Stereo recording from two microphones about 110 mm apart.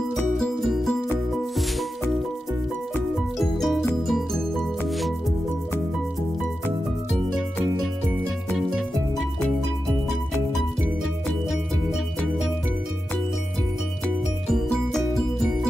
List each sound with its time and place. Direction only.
0.1 s music: 5° left (ahead or behind)
3.3 s music: centre (ahead or behind)
8.5 s music: centre (ahead or behind)
10.5 s music: centre (ahead or behind)
14.0 s music: 5° left (ahead or behind)